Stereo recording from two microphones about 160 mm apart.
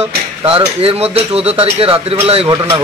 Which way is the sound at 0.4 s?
35° right (ahead or behind).